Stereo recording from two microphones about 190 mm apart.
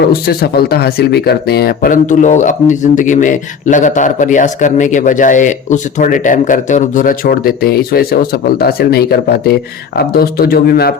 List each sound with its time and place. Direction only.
0.1 s speech: 55° left (ahead or behind)